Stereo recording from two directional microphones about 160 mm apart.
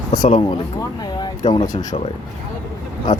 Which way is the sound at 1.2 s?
25° left (ahead or behind).